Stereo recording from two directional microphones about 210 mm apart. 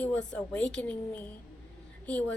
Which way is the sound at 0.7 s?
5° left (ahead or behind).